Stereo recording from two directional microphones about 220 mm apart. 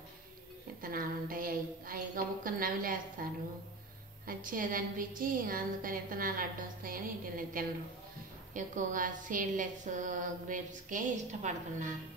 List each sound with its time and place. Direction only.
0.8 s a woman's voice: 40° right (ahead or behind)
4.3 s a woman's voice: 40° right (ahead or behind)